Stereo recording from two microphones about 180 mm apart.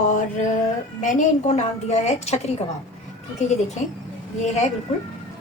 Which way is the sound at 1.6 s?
40° left (ahead or behind).